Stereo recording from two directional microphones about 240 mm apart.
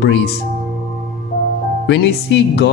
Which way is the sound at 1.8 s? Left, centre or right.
Left.